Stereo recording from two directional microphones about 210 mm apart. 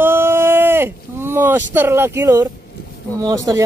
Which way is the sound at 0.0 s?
10° right (ahead or behind).